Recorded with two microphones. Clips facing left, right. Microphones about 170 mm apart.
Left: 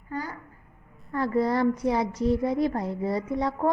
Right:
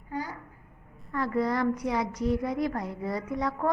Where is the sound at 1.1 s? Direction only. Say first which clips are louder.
Left 3 dB; 30° left (ahead or behind).